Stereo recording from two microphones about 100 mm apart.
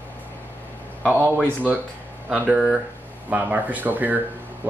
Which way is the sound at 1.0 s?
20° right (ahead or behind).